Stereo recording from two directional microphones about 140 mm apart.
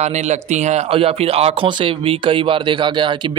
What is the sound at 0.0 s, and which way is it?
Speech, 55° right (ahead or behind).